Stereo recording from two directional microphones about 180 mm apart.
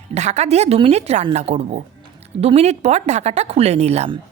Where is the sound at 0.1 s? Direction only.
40° right (ahead or behind).